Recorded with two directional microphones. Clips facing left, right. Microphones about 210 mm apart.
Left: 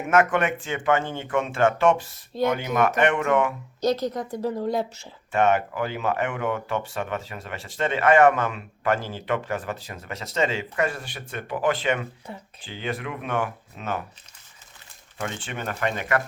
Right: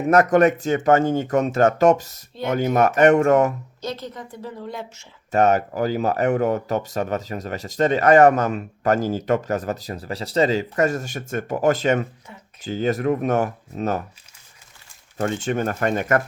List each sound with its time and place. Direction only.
0.1 s speech: 40° right (ahead or behind)
3.8 s a woman's voice: 40° left (ahead or behind)
5.3 s speech: 40° right (ahead or behind)
12.3 s a woman's voice: 35° left (ahead or behind)
12.6 s speech: 40° right (ahead or behind)
15.2 s speech: 45° right (ahead or behind)